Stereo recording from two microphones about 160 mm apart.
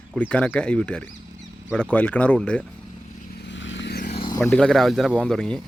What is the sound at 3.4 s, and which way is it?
Vehicle, 90° left.